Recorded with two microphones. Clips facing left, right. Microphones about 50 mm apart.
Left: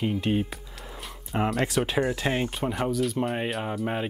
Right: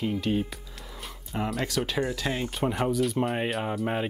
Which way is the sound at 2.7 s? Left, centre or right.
Centre.